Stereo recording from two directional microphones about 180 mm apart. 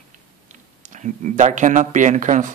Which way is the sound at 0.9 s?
40° right (ahead or behind).